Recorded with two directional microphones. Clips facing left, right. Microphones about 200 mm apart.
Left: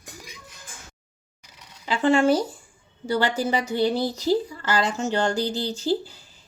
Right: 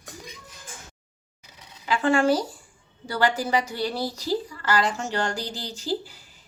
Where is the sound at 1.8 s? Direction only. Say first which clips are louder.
Left 2 dB; 25° left (ahead or behind).